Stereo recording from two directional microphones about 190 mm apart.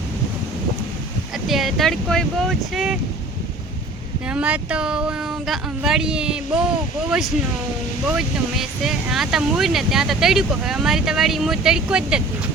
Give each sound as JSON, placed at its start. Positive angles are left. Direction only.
{"t": 1.5, "sound": "speech", "side_deg": 0}
{"t": 4.3, "sound": "speech", "side_deg": -5}